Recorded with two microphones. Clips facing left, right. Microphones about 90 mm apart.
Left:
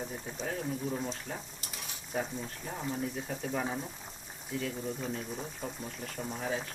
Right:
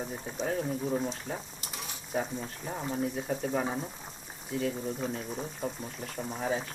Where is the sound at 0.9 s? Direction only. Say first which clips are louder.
Right 4 dB; 15° right (ahead or behind).